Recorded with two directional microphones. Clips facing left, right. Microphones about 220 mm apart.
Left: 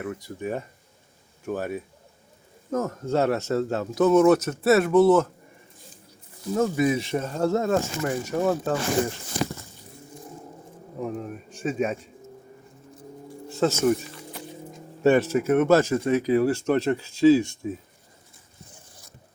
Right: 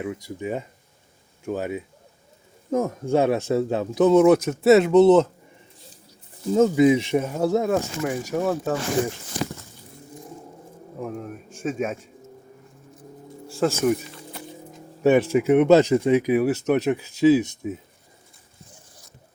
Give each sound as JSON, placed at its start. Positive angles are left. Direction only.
{"t": 0.3, "sound": "speech", "side_deg": -10}
{"t": 6.5, "sound": "speech", "side_deg": -20}
{"t": 11.0, "sound": "speech", "side_deg": 0}
{"t": 13.6, "sound": "speech", "side_deg": -5}
{"t": 15.0, "sound": "speech", "side_deg": -15}